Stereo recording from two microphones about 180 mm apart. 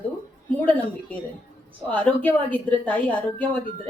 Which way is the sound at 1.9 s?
10° left (ahead or behind).